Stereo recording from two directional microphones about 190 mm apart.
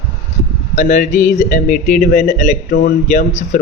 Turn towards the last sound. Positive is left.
turn(degrees=40)  # may be behind; listen again after turning